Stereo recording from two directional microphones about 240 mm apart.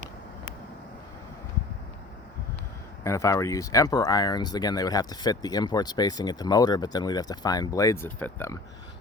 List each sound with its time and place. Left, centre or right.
3.0 s speech: centre